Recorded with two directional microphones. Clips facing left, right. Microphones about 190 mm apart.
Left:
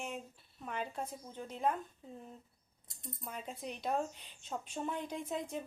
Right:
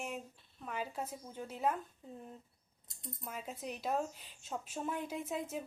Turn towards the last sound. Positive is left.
turn(degrees=-5)  # may be behind; listen again after turning